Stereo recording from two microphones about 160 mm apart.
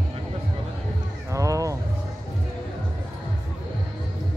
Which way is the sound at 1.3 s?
20° right (ahead or behind).